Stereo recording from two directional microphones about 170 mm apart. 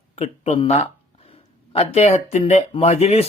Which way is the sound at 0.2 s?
35° left (ahead or behind).